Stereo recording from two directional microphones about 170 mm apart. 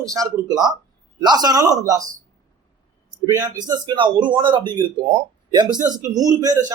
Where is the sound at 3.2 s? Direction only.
15° right (ahead or behind).